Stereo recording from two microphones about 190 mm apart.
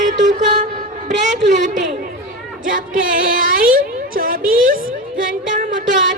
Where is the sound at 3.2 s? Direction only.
50° right (ahead or behind).